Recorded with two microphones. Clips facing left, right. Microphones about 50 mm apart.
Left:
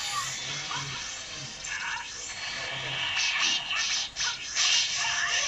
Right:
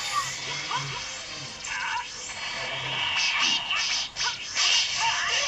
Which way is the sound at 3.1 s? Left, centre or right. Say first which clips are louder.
Right 2 dB; right.